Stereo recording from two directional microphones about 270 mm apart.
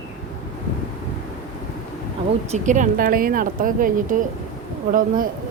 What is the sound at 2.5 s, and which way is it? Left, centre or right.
Speech, right.